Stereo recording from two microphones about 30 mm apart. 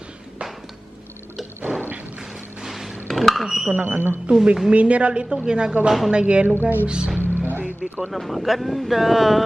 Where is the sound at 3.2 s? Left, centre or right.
Centre.